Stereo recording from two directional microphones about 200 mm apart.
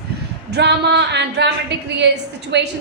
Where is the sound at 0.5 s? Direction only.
55° right (ahead or behind).